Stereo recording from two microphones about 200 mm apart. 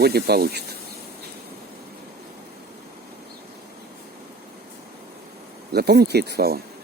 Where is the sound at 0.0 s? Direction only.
50° right (ahead or behind).